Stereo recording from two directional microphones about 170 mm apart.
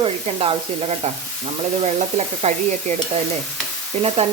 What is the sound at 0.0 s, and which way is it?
Sizzle, 35° right (ahead or behind).